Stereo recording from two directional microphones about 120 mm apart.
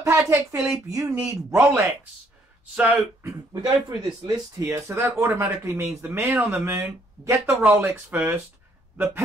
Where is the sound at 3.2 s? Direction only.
30° right (ahead or behind).